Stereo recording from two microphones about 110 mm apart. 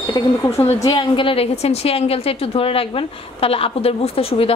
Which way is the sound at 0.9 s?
50° left (ahead or behind).